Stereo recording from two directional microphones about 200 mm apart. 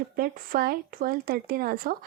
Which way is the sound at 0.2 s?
50° right (ahead or behind).